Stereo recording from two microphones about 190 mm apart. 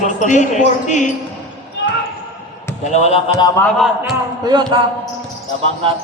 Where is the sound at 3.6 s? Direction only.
Centre (ahead or behind).